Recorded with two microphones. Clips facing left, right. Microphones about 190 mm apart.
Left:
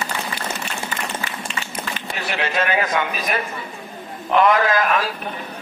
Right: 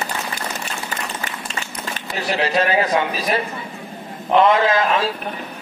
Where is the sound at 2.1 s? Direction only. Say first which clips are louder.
Right 4 dB; 35° right (ahead or behind).